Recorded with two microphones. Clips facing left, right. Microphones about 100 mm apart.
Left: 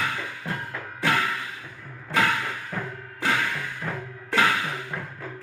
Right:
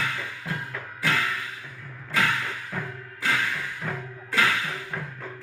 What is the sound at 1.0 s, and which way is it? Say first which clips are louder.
Music: left 2 dB; 30° left (ahead or behind).